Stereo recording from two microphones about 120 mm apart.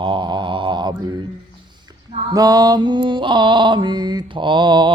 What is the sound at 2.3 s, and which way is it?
Mantra, 30° right (ahead or behind).